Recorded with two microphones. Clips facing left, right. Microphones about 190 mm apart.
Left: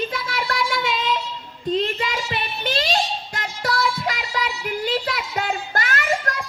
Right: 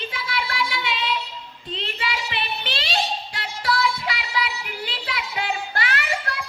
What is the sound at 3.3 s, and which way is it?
Music, 45° left (ahead or behind).